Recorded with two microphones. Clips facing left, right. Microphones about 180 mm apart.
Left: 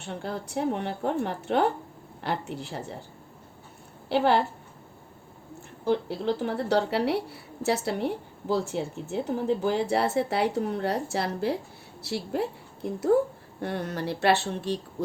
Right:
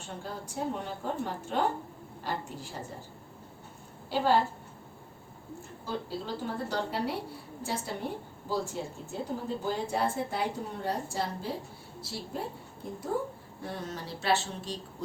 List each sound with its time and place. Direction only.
0.0 s a woman's voice: 70° left (ahead or behind)
4.1 s a woman's voice: 70° left (ahead or behind)
5.8 s a woman's voice: 70° left (ahead or behind)